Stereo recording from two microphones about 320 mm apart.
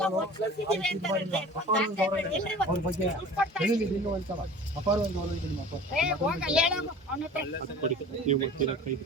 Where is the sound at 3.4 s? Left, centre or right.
Centre.